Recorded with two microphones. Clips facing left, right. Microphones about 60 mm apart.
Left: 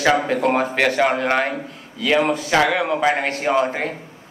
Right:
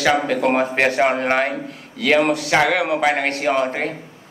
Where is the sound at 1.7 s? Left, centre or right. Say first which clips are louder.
Right 2 dB; right.